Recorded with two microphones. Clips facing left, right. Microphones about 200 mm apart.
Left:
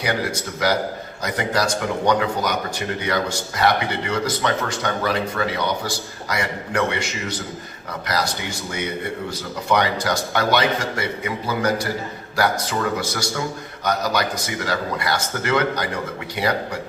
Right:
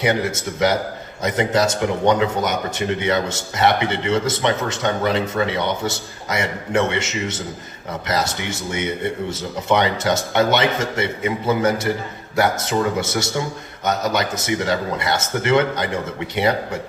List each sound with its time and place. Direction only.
0.0 s speech: 25° right (ahead or behind)